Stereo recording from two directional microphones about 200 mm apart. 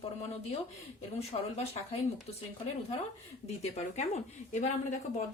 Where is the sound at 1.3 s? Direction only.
30° left (ahead or behind).